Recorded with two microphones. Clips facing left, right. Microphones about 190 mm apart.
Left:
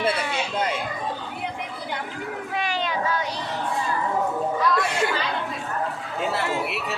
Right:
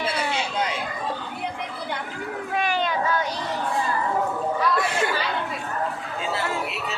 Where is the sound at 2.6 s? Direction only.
50° right (ahead or behind).